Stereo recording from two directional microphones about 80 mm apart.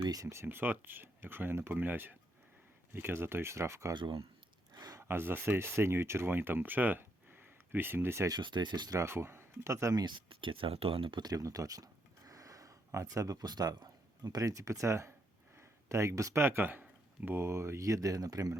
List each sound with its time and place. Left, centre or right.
0.1 s speech: right
0.4 s speech: right
3.9 s speech: right
4.7 s a sound: right
4.9 s speech: right
8.3 s speech: right
8.9 s speech: right
10.0 s speech: right
11.3 s speech: right
16.8 s a sound: centre
17.3 s speech: right